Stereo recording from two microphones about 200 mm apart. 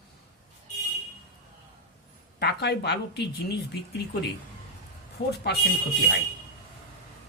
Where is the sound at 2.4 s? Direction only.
55° left (ahead or behind).